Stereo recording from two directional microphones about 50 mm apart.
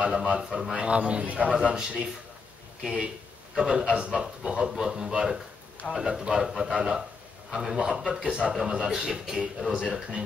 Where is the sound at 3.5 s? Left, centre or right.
Centre.